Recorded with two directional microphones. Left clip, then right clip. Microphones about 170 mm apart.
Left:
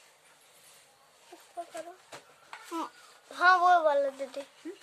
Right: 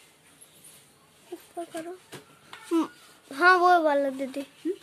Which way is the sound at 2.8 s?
15° right (ahead or behind).